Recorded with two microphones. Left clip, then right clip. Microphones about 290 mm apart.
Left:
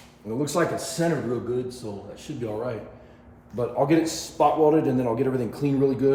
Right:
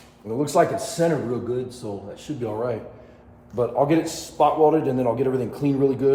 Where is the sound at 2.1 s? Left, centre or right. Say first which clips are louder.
Right 3 dB; centre.